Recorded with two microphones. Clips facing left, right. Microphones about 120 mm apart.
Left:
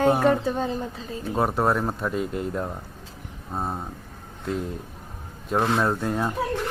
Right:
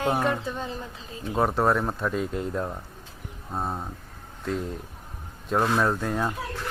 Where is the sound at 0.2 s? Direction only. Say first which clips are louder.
Left 6 dB; 35° left (ahead or behind).